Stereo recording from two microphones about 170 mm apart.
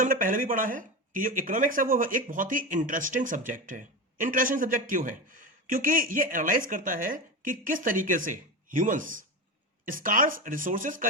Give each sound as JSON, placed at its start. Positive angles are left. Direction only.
{"t": 0.0, "sound": "speech", "side_deg": -50}